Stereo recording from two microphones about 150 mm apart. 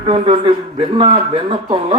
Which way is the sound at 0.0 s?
35° right (ahead or behind).